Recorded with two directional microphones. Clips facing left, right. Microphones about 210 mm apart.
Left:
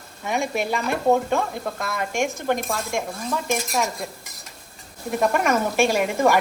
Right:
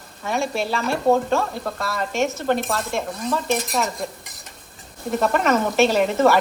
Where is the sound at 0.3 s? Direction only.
15° left (ahead or behind).